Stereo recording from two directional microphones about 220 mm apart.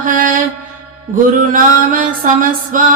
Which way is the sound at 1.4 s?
40° right (ahead or behind).